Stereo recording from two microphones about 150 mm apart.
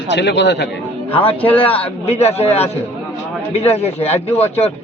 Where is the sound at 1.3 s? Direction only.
10° left (ahead or behind).